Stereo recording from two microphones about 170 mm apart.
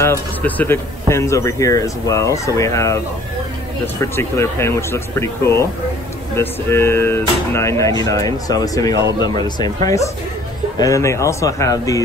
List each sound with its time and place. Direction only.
0.0 s speech: 10° left (ahead or behind)